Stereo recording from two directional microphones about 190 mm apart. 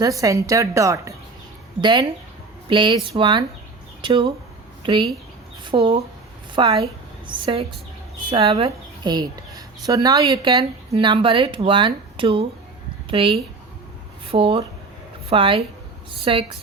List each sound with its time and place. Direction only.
0.0 s a woman's voice: 15° right (ahead or behind)
5.6 s a woman's voice: 25° right (ahead or behind)